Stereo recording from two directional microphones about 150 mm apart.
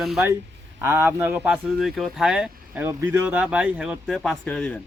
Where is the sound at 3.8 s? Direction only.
Centre (ahead or behind).